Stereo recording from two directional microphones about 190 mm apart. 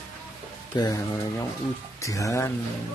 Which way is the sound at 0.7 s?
20° left (ahead or behind).